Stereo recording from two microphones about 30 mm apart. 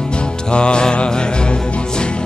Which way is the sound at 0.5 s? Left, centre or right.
Left.